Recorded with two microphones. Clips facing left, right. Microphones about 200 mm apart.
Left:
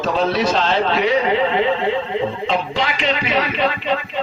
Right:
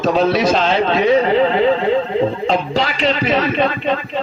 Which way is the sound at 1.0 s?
40° right (ahead or behind).